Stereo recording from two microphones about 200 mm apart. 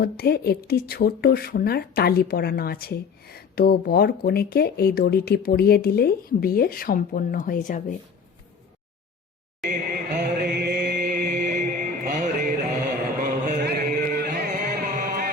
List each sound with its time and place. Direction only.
0.0 s speech: 50° left (ahead or behind)
9.6 s chant: 40° right (ahead or behind)
13.1 s music: 40° right (ahead or behind)